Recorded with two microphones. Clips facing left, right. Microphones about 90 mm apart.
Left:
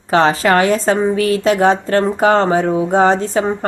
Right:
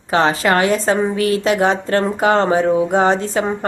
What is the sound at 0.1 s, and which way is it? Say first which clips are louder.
Speech: left 3 dB; 35° left (ahead or behind).